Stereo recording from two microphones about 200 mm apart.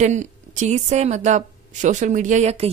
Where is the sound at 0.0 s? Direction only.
35° right (ahead or behind).